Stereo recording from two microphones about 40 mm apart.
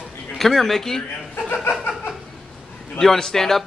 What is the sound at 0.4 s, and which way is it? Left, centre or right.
Speech, centre.